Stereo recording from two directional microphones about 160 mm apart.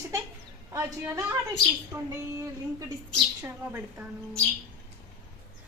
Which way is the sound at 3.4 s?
15° right (ahead or behind).